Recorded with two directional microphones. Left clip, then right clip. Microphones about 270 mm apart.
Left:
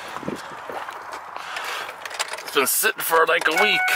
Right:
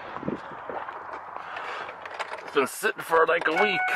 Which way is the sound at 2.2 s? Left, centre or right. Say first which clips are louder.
Left 4 dB; centre.